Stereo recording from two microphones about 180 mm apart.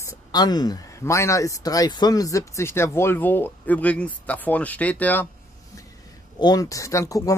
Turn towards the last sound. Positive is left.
turn(degrees=20)  # may be behind; listen again after turning